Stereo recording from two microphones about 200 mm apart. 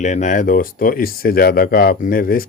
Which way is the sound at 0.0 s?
35° left (ahead or behind).